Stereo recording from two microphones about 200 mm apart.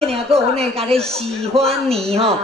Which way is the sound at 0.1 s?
30° right (ahead or behind).